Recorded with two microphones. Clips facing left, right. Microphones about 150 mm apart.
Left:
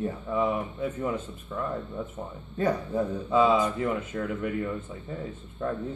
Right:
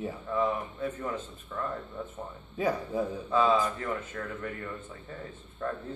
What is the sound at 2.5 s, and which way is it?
Speech, 5° right (ahead or behind).